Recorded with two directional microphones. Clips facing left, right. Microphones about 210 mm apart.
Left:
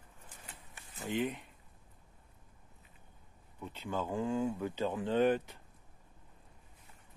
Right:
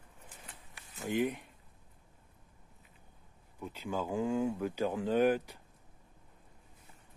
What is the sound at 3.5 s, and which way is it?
Speech, 5° right (ahead or behind).